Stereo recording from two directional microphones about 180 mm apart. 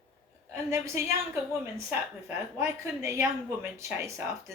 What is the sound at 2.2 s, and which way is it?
A woman's voice, 15° right (ahead or behind).